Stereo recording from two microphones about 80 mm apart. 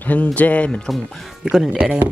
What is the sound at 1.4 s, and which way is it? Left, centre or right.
Speech, centre.